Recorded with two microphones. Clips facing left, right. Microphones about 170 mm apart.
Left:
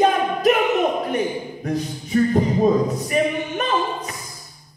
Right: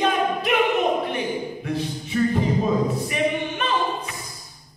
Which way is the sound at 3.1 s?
40° left (ahead or behind).